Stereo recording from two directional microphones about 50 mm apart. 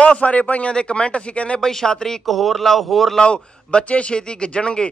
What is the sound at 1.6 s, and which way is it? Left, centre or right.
Speech, centre.